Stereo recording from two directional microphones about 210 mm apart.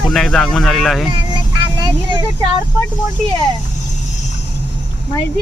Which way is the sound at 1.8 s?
20° right (ahead or behind).